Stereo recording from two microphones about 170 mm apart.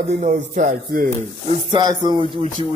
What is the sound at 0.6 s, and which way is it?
Speech, 50° right (ahead or behind).